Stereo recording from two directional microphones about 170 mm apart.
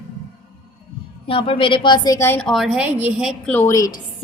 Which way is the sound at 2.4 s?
Centre (ahead or behind).